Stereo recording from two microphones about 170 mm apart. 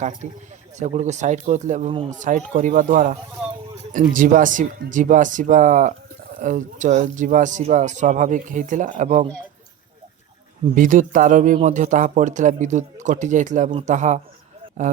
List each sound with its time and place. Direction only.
0.2 s speech: 45° right (ahead or behind)
10.8 s speech: 50° right (ahead or behind)